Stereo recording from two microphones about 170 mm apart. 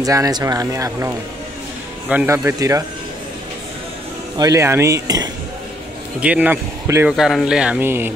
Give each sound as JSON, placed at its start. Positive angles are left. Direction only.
{"t": 0.0, "sound": "speech", "side_deg": -20}
{"t": 4.4, "sound": "speech", "side_deg": -20}
{"t": 6.2, "sound": "speech", "side_deg": -10}
{"t": 7.1, "sound": "speech", "side_deg": 0}